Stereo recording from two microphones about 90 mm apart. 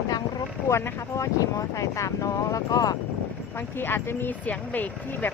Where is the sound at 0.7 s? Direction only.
30° left (ahead or behind); by 3.0 s 45° left (ahead or behind).